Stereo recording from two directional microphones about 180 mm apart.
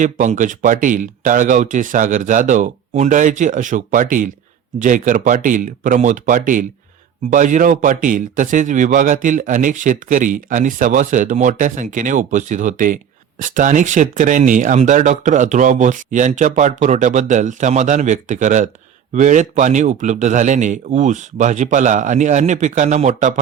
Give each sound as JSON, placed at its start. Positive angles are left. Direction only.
{"t": 0.0, "sound": "a man's voice", "side_deg": -45}